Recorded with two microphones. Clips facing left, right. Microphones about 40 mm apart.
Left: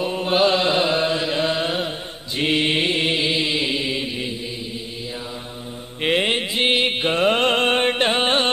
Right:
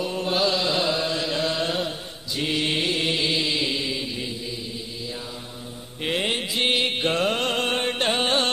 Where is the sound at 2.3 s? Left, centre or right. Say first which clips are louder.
Left 5 dB; left.